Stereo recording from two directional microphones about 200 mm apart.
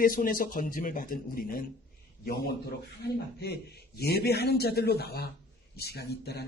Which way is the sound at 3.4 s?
55° left (ahead or behind).